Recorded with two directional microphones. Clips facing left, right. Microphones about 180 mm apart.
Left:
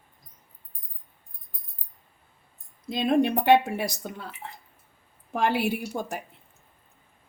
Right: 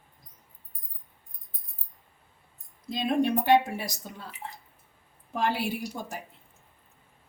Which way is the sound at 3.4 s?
65° left (ahead or behind).